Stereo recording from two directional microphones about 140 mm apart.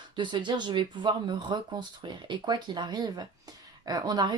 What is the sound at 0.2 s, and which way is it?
Speech, 35° right (ahead or behind).